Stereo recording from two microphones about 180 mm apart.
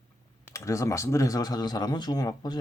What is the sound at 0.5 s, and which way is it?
Speech, 15° left (ahead or behind).